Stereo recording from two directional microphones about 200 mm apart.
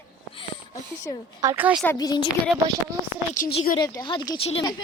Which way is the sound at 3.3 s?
45° left (ahead or behind).